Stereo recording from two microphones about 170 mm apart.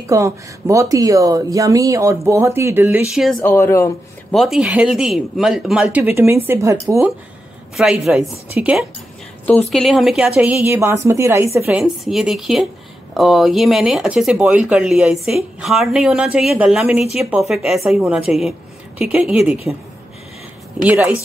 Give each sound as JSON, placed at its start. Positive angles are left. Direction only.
{"t": 0.0, "sound": "speech", "side_deg": -20}
{"t": 3.5, "sound": "speech", "side_deg": 15}
{"t": 4.3, "sound": "speech", "side_deg": 0}
{"t": 7.7, "sound": "speech", "side_deg": 0}
{"t": 11.8, "sound": "speech", "side_deg": 0}
{"t": 20.8, "sound": "speech", "side_deg": -10}